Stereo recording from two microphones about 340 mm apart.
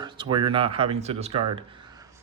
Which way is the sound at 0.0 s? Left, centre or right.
Centre.